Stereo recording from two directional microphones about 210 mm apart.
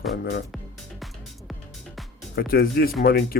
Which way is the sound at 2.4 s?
45° left (ahead or behind).